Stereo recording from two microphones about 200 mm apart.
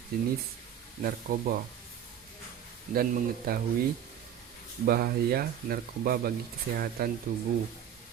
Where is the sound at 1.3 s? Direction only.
45° right (ahead or behind).